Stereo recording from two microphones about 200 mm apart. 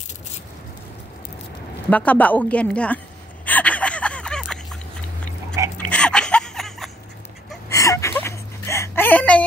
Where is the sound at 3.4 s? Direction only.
5° left (ahead or behind).